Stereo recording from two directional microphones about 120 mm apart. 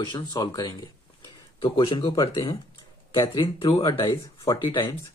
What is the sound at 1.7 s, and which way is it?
Speech, 45° left (ahead or behind).